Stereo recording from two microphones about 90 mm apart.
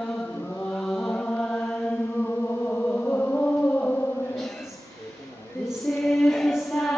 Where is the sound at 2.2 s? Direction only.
15° left (ahead or behind).